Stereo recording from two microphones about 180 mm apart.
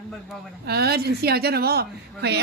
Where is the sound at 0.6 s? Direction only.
65° right (ahead or behind).